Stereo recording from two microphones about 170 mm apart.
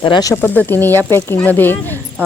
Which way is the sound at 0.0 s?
25° left (ahead or behind).